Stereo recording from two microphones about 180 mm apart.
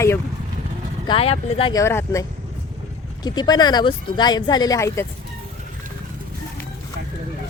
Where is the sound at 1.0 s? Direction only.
30° left (ahead or behind).